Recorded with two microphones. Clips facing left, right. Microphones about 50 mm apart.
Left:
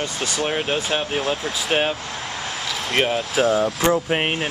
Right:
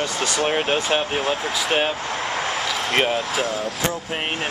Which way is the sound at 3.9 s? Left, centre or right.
Left.